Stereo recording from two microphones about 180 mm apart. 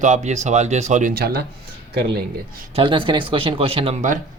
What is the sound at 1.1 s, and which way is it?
Speech, 60° right (ahead or behind).